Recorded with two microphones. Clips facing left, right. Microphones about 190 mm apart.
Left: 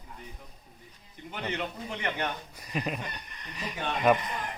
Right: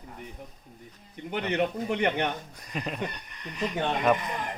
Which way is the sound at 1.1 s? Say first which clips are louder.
Right 6 dB; 60° right (ahead or behind).